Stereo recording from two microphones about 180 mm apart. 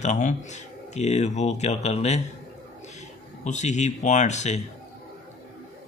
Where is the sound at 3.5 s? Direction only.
40° left (ahead or behind).